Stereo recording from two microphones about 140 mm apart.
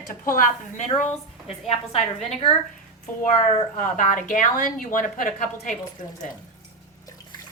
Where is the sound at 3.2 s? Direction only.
65° left (ahead or behind).